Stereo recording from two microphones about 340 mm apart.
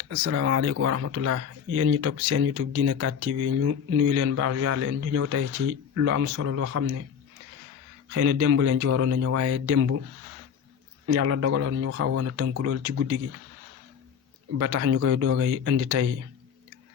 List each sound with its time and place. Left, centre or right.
0.2 s speech: right
8.1 s speech: right
11.0 s speech: right
14.6 s speech: right